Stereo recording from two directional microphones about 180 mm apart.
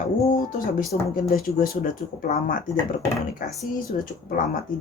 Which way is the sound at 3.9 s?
45° left (ahead or behind).